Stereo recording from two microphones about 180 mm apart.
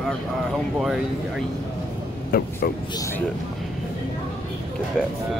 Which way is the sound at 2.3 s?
55° left (ahead or behind).